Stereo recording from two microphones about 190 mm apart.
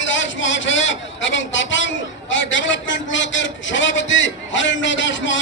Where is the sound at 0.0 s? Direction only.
80° left.